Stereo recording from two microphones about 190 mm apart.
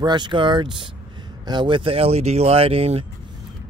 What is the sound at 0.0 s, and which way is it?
Speech, 25° right (ahead or behind).